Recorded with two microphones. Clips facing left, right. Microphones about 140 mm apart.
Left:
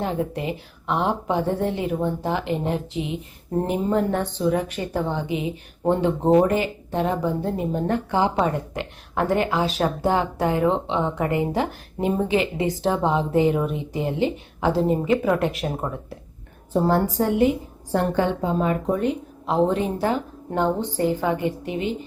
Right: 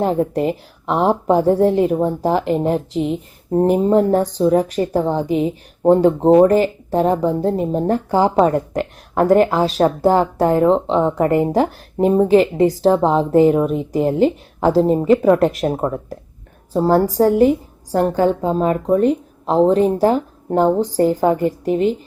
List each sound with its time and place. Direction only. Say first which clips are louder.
0.0 s a woman's voice: right 8 dB; 40° right (ahead or behind)